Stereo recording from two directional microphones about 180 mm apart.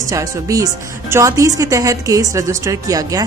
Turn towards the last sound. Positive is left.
turn(degrees=-20)  # may be behind; listen again after turning